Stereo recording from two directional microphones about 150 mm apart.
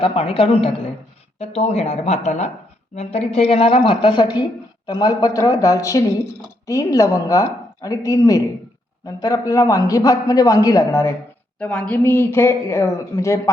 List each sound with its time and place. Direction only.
0.0 s a woman's voice: 40° left (ahead or behind); by 11.1 s 20° left (ahead or behind)
11.6 s speech: 5° left (ahead or behind)